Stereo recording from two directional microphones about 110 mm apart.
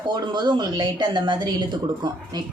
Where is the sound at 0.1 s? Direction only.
40° right (ahead or behind).